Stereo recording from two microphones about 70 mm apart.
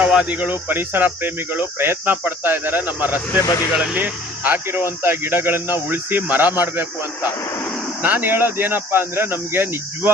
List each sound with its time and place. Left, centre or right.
0.0 s speech: centre
3.4 s speech: left
3.7 s speech: centre
3.9 s speech: right
8.0 s speech: right